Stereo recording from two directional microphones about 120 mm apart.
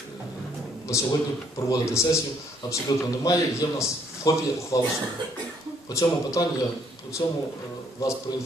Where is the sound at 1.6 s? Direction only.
25° left (ahead or behind).